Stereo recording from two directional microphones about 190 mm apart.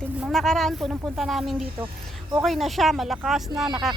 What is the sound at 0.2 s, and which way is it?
Speech, centre (ahead or behind).